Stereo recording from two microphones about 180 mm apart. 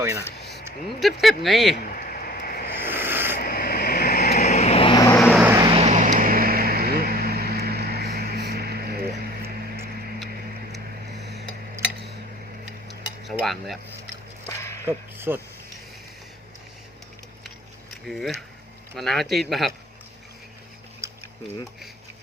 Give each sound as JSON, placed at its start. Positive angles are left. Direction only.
{"t": 0.9, "sound": "speech", "side_deg": 0}
{"t": 1.7, "sound": "a sound", "side_deg": 50}
{"t": 2.7, "sound": "a sound", "side_deg": -10}
{"t": 3.3, "sound": "vehicle", "side_deg": 55}
{"t": 4.4, "sound": "vehicle", "side_deg": 40}
{"t": 5.1, "sound": "vehicle", "side_deg": 5}
{"t": 5.5, "sound": "vehicle", "side_deg": -30}
{"t": 13.2, "sound": "cutlery", "side_deg": 0}
{"t": 14.8, "sound": "speech", "side_deg": -10}
{"t": 18.0, "sound": "speech", "side_deg": 0}
{"t": 21.0, "sound": "tick-tock", "side_deg": -15}